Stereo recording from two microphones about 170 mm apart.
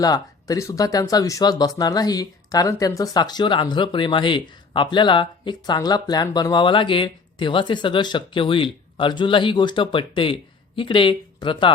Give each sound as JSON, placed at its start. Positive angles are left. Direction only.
{"t": 0.0, "sound": "speech", "side_deg": 20}